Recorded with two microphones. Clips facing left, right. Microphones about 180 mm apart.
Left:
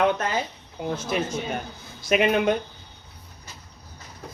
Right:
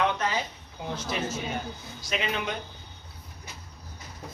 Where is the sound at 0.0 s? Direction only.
50° left (ahead or behind).